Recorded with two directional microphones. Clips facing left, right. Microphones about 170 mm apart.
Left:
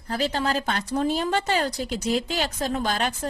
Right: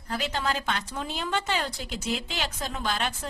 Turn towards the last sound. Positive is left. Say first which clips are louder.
# left 4 dB
turn(degrees=45)  # may be behind; listen again after turning